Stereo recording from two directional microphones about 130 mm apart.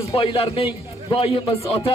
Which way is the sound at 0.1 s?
45° left (ahead or behind).